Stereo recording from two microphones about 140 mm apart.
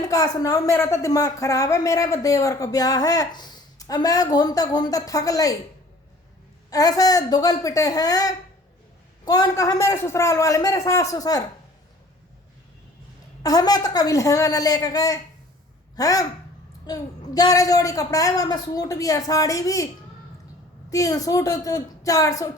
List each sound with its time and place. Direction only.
0.1 s speech: 25° left (ahead or behind)
6.7 s speech: 25° left (ahead or behind)
13.4 s speech: 25° left (ahead or behind)
20.9 s speech: 25° left (ahead or behind)